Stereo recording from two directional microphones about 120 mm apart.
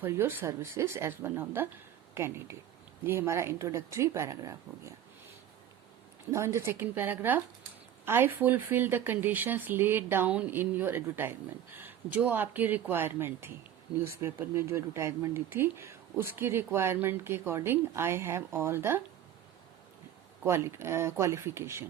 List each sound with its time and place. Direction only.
0.0 s speech: 15° right (ahead or behind)
6.3 s speech: 25° right (ahead or behind)
20.4 s speech: 20° right (ahead or behind)